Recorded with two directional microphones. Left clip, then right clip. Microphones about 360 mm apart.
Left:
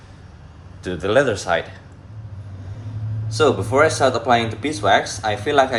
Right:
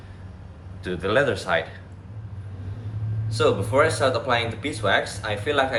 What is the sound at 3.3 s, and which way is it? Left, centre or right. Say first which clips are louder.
Speech: left 4 dB; centre.